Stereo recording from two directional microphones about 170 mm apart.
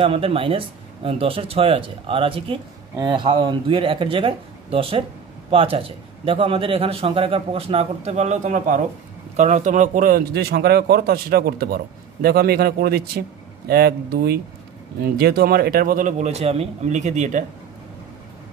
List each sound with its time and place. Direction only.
0.0 s speech: 35° right (ahead or behind)